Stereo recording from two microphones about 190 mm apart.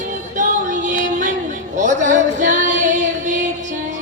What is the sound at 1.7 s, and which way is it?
Female singing, 40° right (ahead or behind).